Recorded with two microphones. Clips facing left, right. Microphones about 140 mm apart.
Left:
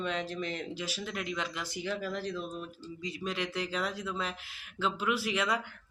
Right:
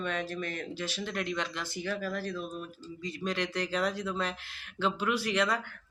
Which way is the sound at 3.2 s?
5° left (ahead or behind).